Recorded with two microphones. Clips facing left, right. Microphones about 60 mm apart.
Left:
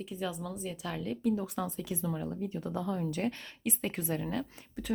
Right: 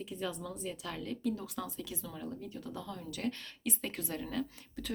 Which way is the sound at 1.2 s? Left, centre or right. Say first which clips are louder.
Left 7 dB; centre.